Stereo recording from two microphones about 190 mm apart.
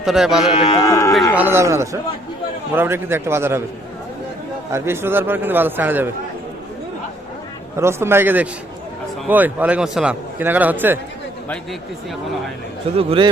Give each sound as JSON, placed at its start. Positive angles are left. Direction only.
{"t": 0.0, "sound": "speech", "side_deg": 0}
{"t": 0.8, "sound": "speech", "side_deg": 15}
{"t": 1.4, "sound": "a man's voice", "side_deg": -10}
{"t": 4.7, "sound": "a man's voice", "side_deg": -10}
{"t": 7.8, "sound": "a man's voice", "side_deg": -15}
{"t": 13.0, "sound": "a man's voice", "side_deg": -30}